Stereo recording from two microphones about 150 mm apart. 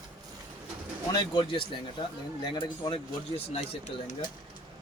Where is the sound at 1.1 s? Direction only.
30° left (ahead or behind).